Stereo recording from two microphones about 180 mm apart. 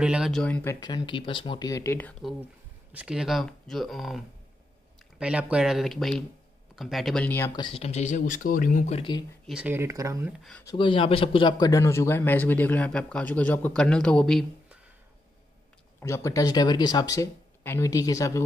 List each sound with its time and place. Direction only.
0.0 s speech: 5° right (ahead or behind)
0.7 s speech: 25° left (ahead or behind)
2.9 s speech: 5° right (ahead or behind)
5.2 s speech: 5° right (ahead or behind); by 7.5 s 10° left (ahead or behind)
7.5 s speech: 30° left (ahead or behind)
9.5 s speech: 10° right (ahead or behind)
10.6 s speech: 25° left (ahead or behind); by 14.4 s 5° left (ahead or behind)
16.0 s speech: 15° left (ahead or behind)